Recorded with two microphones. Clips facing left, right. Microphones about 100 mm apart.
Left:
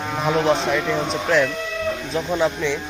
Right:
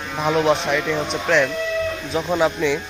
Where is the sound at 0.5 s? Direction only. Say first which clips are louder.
Even; centre (ahead or behind).